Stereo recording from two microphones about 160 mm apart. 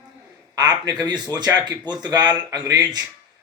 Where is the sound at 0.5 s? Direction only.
25° right (ahead or behind).